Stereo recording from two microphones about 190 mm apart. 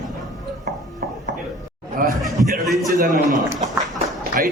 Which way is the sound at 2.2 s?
Centre (ahead or behind).